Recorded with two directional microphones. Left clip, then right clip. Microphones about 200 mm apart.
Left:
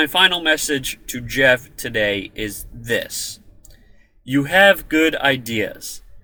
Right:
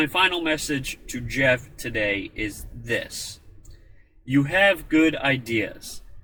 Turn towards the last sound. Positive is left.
turn(degrees=15)  # may be behind; listen again after turning